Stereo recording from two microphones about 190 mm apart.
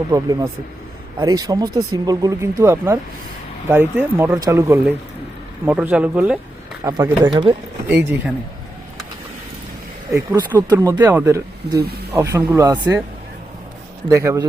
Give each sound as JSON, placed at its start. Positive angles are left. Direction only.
{"t": 0.1, "sound": "speech", "side_deg": -20}
{"t": 6.8, "sound": "speech", "side_deg": -20}
{"t": 7.9, "sound": "speech", "side_deg": -10}
{"t": 10.7, "sound": "speech", "side_deg": -20}
{"t": 14.1, "sound": "speech", "side_deg": -15}